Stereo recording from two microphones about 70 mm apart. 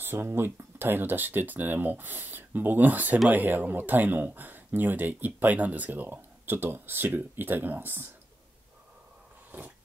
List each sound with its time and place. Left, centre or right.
0.0 s speech: right